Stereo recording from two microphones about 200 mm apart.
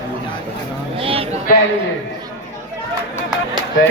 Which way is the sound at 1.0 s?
30° right (ahead or behind).